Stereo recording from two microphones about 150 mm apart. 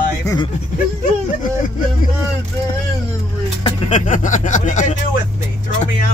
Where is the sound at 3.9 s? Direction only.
55° left (ahead or behind).